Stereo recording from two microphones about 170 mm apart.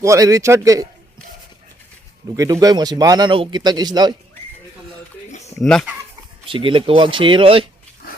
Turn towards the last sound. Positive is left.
turn(degrees=-30)  # may be behind; listen again after turning